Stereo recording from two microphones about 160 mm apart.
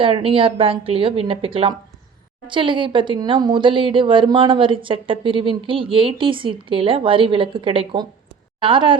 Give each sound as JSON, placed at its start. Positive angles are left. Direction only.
{"t": 0.0, "sound": "speech", "side_deg": -35}